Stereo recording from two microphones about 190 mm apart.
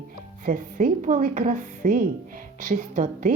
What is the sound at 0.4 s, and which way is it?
Speech, 45° right (ahead or behind).